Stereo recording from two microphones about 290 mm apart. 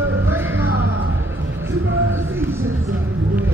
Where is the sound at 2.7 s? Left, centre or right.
Right.